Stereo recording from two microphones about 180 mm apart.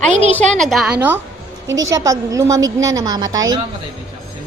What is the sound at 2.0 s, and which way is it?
A woman's voice, 20° right (ahead or behind).